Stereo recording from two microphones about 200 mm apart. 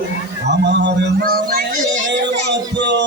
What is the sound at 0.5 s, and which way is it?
Music, 60° right (ahead or behind).